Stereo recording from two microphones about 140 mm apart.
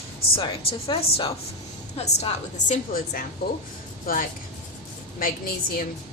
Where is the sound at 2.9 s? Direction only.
90° left.